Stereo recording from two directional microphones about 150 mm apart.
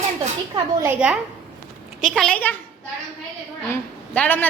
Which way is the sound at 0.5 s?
20° right (ahead or behind).